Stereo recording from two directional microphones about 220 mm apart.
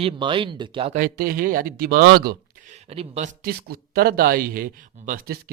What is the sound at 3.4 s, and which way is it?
Speech, 40° right (ahead or behind).